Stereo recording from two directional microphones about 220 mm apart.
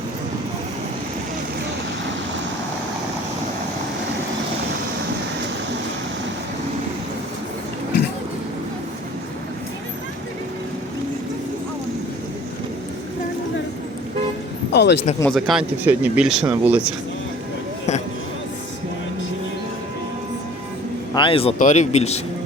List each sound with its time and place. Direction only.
14.7 s a sound: 50° left (ahead or behind)
15.2 s speech: centre (ahead or behind)
21.1 s speech: 20° left (ahead or behind)